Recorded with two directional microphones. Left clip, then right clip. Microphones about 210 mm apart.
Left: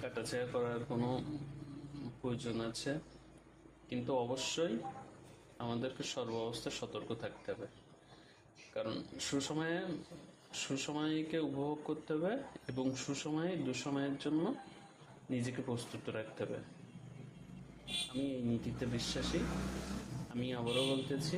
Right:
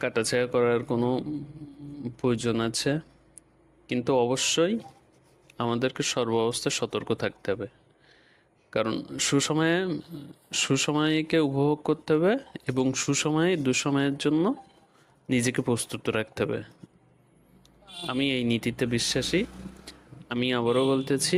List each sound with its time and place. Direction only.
0.0 s speech: 45° right (ahead or behind)
2.2 s speech: 45° right (ahead or behind)
8.7 s speech: 40° right (ahead or behind)
18.3 s speech: 45° right (ahead or behind)
20.4 s speech: 45° right (ahead or behind)